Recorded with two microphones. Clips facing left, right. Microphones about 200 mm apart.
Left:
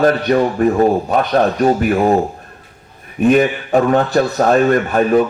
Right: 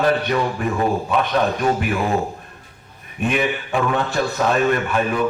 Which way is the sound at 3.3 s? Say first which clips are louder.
Left 9 dB; 40° left (ahead or behind).